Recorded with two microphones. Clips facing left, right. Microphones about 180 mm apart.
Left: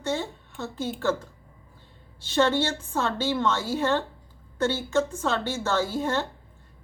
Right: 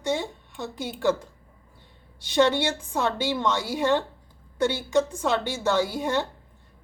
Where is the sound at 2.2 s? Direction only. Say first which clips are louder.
Right 1 dB; 15° right (ahead or behind).